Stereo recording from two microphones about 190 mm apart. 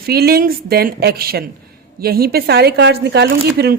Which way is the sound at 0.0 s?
55° right (ahead or behind).